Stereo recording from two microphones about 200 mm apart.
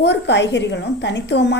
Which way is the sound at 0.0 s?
60° left (ahead or behind).